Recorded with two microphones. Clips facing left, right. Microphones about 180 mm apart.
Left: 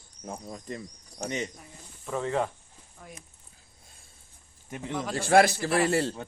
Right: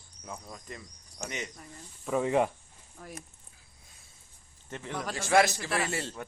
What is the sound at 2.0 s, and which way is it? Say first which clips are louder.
Speech: right 2 dB; 10° right (ahead or behind).